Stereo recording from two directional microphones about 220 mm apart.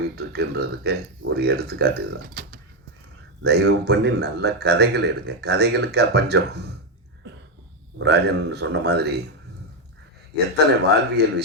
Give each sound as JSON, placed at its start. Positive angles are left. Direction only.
{"t": 0.2, "sound": "speech", "side_deg": -45}
{"t": 7.9, "sound": "speech", "side_deg": -50}
{"t": 10.8, "sound": "speech", "side_deg": -50}